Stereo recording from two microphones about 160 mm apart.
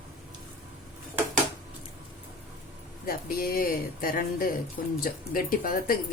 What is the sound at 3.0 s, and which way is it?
Speech, 65° left (ahead or behind).